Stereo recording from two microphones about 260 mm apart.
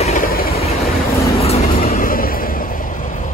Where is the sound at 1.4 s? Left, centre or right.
Left.